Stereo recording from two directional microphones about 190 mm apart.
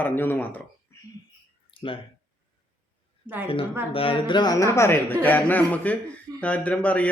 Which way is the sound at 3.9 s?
30° left (ahead or behind).